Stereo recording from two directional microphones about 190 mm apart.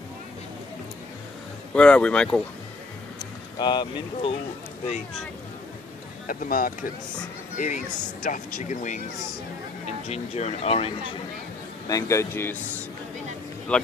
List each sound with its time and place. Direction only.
1.7 s speech: 5° left (ahead or behind)
3.2 s speech: 25° left (ahead or behind)
6.2 s speech: 50° left (ahead or behind); by 11.1 s 30° left (ahead or behind)
11.9 s a man's voice: 15° left (ahead or behind)
13.7 s a man's voice: 5° left (ahead or behind)